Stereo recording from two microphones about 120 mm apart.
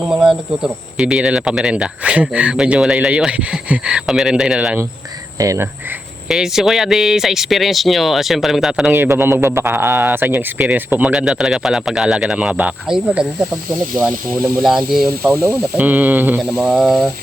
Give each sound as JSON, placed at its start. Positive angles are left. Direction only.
{"t": 0.1, "sound": "speech", "side_deg": -5}
{"t": 5.4, "sound": "speech", "side_deg": -25}
{"t": 6.2, "sound": "speech", "side_deg": -5}
{"t": 8.9, "sound": "speech", "side_deg": -20}
{"t": 14.6, "sound": "speech", "side_deg": -5}
{"t": 15.8, "sound": "speech", "side_deg": -15}